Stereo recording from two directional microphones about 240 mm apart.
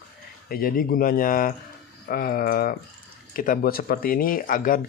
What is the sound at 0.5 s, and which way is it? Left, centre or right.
Speech, left.